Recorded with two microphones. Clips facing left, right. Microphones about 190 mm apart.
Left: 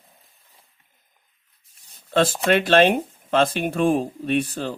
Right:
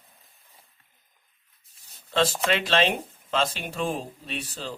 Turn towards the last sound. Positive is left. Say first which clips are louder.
# left 11 dB
turn(degrees=55)  # may be behind; listen again after turning